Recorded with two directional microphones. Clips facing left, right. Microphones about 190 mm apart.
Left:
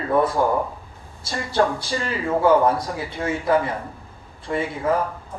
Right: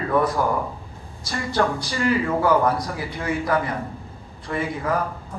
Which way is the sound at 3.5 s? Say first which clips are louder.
Left 3 dB; 25° left (ahead or behind).